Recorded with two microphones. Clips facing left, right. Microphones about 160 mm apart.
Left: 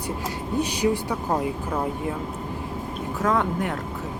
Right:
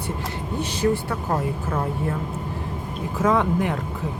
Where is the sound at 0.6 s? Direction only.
15° left (ahead or behind).